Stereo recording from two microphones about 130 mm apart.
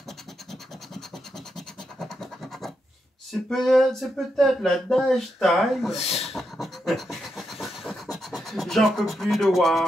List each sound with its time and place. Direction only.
2.0 s scratch: 5° left (ahead or behind)
3.4 s speech: centre (ahead or behind)
5.9 s speech: 55° left (ahead or behind)
6.2 s pant: centre (ahead or behind)